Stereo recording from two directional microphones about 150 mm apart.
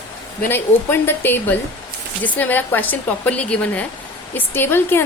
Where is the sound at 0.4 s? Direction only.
15° left (ahead or behind).